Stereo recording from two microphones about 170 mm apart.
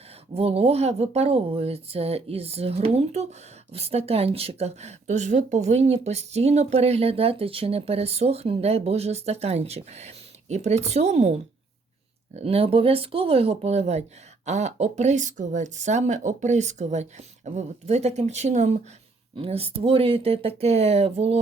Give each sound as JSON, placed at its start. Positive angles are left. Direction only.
{"t": 0.3, "sound": "speech", "side_deg": -35}